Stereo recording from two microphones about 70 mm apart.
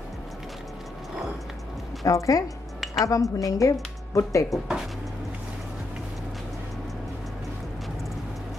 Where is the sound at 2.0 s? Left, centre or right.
Left.